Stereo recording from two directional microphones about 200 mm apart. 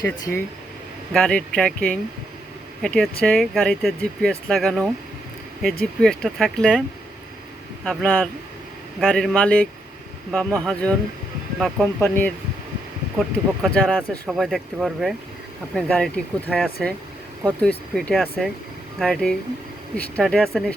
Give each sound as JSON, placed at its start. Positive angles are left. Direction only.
{"t": 0.0, "sound": "speech", "side_deg": 15}
{"t": 1.1, "sound": "speech", "side_deg": 5}
{"t": 7.9, "sound": "speech", "side_deg": 5}